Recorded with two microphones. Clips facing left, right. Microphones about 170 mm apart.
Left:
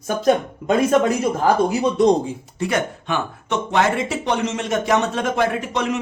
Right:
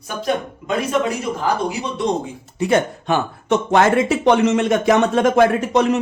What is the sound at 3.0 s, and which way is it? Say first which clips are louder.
Speech: right 5 dB; 40° right (ahead or behind).